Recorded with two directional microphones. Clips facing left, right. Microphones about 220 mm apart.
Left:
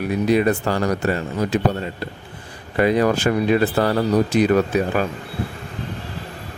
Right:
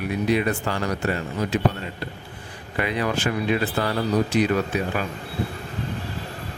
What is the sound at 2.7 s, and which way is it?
Speech, 40° left (ahead or behind).